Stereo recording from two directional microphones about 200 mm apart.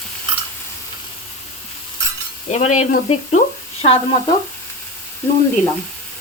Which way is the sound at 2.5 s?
35° left (ahead or behind).